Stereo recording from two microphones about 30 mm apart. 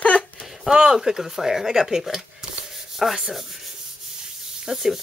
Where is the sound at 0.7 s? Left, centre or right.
Right.